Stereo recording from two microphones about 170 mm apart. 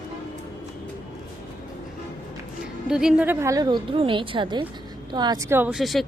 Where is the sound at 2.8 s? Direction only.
5° right (ahead or behind).